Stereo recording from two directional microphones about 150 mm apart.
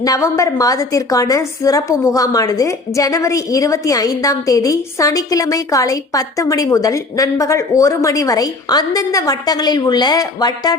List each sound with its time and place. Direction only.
0.0 s a woman's voice: 20° left (ahead or behind)